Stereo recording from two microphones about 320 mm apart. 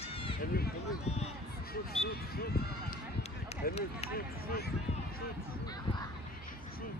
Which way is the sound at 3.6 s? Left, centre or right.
Centre.